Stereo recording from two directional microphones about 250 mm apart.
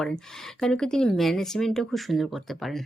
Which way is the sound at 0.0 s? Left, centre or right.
Centre.